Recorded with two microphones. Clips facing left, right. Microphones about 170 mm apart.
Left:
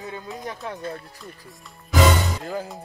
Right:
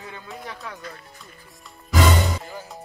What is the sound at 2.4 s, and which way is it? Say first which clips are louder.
Music: left 7 dB; 60° left (ahead or behind).